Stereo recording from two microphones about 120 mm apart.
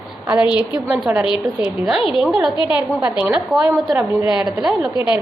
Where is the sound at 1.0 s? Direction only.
10° right (ahead or behind).